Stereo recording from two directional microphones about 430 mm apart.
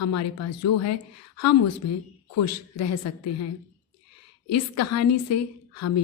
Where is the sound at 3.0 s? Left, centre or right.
Left.